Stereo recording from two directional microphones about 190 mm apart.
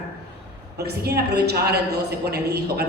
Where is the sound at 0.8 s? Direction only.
60° right (ahead or behind).